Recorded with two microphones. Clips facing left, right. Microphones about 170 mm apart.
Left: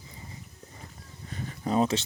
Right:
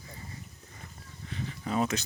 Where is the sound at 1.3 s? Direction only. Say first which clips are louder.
Left 4 dB; 40° left (ahead or behind).